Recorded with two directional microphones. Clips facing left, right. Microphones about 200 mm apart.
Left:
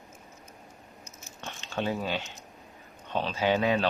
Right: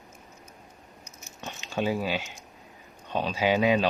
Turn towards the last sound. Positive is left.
turn(degrees=-15)  # may be behind; listen again after turning